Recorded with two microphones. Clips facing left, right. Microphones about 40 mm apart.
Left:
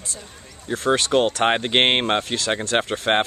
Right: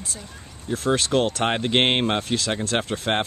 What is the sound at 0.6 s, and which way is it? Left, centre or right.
Speech, centre.